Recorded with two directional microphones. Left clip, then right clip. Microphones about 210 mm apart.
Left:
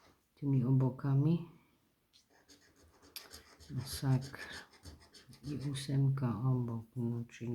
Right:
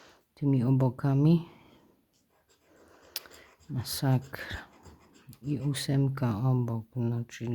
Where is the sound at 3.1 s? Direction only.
50° right (ahead or behind).